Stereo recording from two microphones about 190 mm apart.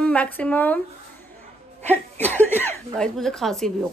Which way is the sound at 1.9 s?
10° left (ahead or behind).